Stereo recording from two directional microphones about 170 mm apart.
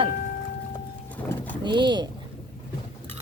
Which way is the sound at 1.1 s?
10° left (ahead or behind).